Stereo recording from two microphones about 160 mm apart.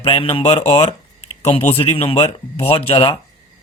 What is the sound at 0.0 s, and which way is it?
Speech, 35° left (ahead or behind).